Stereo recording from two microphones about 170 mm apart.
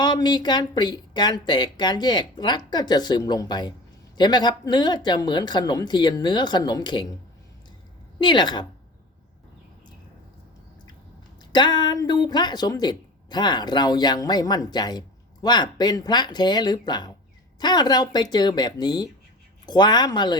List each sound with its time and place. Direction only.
0.0 s speech: 25° left (ahead or behind)
8.2 s speech: 30° left (ahead or behind)
11.5 s speech: 25° left (ahead or behind)